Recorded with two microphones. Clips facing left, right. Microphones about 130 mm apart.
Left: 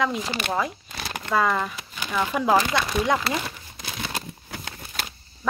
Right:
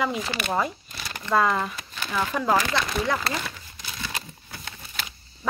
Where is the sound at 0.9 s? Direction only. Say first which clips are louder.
Left 4 dB; 55° left (ahead or behind).